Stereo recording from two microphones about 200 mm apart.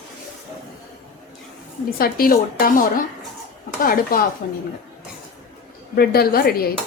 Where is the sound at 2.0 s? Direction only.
45° left (ahead or behind).